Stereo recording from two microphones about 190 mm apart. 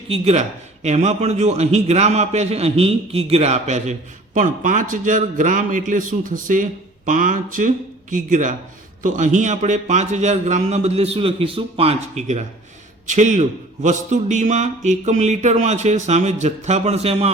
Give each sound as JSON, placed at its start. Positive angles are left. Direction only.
{"t": 0.1, "sound": "a man's voice", "side_deg": -35}